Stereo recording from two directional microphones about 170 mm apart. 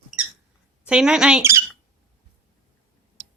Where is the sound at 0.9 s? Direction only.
5° right (ahead or behind).